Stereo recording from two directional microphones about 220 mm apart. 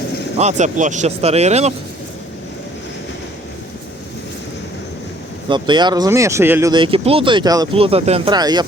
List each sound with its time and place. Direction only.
0.3 s speech: 30° right (ahead or behind)
5.5 s speech: 20° right (ahead or behind)